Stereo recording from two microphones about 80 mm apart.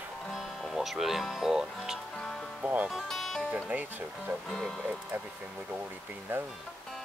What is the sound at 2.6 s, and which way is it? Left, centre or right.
Speech, centre.